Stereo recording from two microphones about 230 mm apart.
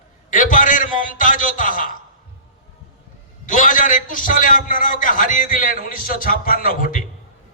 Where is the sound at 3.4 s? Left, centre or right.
Left.